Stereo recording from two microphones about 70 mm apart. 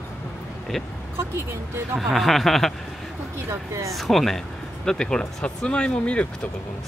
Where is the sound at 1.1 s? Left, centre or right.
Right.